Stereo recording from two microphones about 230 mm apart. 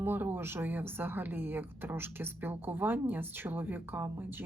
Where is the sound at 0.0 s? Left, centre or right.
Centre.